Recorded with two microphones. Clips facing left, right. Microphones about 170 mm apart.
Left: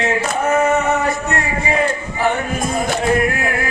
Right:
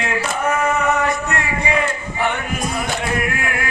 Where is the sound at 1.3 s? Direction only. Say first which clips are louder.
Left 2 dB; 40° left (ahead or behind).